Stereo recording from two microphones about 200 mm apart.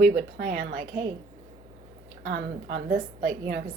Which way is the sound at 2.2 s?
55° right (ahead or behind).